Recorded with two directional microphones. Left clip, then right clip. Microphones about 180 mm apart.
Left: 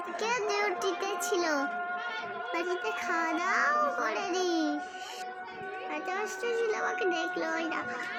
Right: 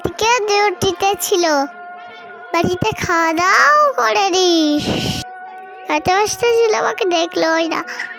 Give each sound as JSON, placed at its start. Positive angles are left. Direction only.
{"t": 0.2, "sound": "a child's voice", "side_deg": -50}